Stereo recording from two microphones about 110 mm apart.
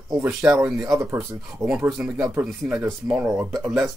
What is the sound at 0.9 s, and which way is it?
Speech, 30° right (ahead or behind).